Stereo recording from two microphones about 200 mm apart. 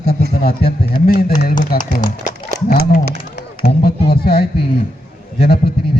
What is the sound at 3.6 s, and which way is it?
A man's voice, 50° left (ahead or behind).